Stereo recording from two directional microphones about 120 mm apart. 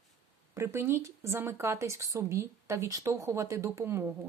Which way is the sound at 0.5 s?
20° right (ahead or behind).